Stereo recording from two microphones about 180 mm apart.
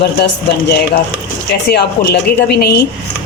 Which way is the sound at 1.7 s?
65° left (ahead or behind).